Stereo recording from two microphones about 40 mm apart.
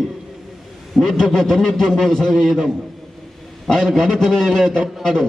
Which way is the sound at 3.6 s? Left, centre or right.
Centre.